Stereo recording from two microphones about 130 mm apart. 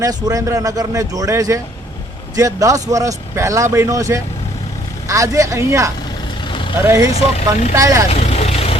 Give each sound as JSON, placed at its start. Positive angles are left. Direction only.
{"t": 0.0, "sound": "speech", "side_deg": -25}
{"t": 7.1, "sound": "speech", "side_deg": 55}
{"t": 7.8, "sound": "speech", "side_deg": -25}
{"t": 8.1, "sound": "vehicle", "side_deg": 50}